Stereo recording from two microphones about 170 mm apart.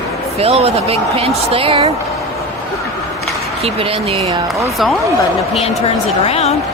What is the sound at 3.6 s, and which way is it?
Speech, 35° right (ahead or behind).